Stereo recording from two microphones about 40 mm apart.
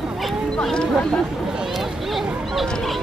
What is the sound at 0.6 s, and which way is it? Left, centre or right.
Speech, centre.